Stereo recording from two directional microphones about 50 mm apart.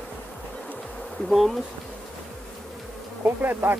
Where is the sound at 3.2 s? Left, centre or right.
Right.